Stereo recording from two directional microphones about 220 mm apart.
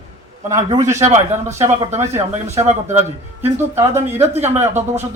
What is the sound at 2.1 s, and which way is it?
Speech, 30° right (ahead or behind).